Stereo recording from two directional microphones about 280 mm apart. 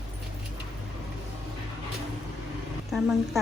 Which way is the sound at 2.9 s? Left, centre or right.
Centre.